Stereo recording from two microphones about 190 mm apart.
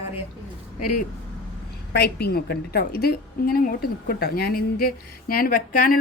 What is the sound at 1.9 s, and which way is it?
A woman's voice, 60° left (ahead or behind).